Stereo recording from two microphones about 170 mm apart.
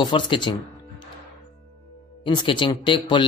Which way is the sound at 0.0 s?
25° left (ahead or behind).